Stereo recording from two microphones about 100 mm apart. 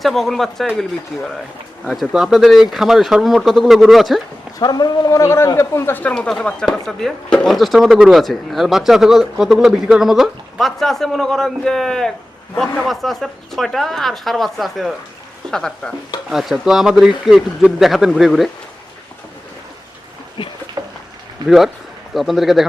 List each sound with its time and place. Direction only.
0.0 s speech: centre (ahead or behind)
4.6 s a man's voice: 40° left (ahead or behind); by 18.5 s centre (ahead or behind)
20.4 s speech: 55° left (ahead or behind)
20.8 s a sound: 40° right (ahead or behind)
22.1 s speech: centre (ahead or behind)